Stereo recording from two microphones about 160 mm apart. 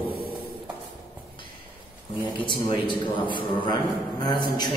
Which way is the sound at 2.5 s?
30° left (ahead or behind).